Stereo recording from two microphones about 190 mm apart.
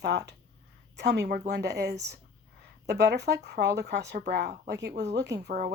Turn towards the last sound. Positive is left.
turn(degrees=-65)  # may be behind; listen again after turning